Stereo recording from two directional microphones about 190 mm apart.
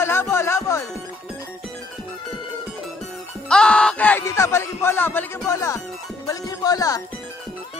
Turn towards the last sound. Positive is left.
turn(degrees=20)  # may be behind; listen again after turning